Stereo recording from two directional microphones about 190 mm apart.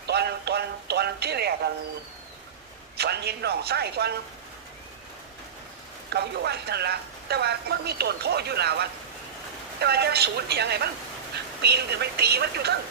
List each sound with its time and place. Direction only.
0.1 s music: 60° right (ahead or behind)
3.0 s speech: 60° right (ahead or behind)
6.1 s speech: 60° right (ahead or behind)